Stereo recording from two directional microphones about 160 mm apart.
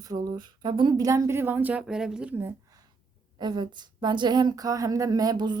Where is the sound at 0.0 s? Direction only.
25° right (ahead or behind).